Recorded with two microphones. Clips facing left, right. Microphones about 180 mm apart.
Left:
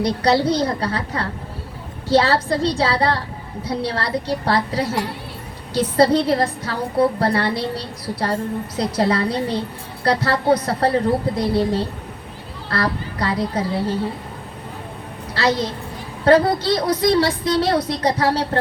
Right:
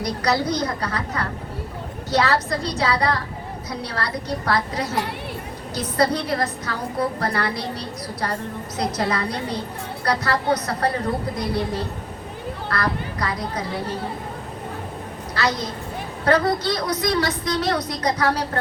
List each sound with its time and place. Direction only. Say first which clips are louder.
0.0 s a woman's voice: left 5 dB; 30° left (ahead or behind)
15.4 s a woman's voice: left 5 dB; 30° left (ahead or behind)